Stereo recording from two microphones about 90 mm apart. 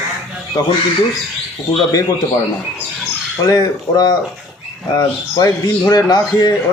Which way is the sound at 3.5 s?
45° left (ahead or behind).